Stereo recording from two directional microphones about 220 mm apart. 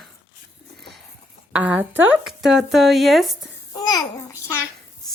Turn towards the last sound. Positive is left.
turn(degrees=15)  # may be behind; listen again after turning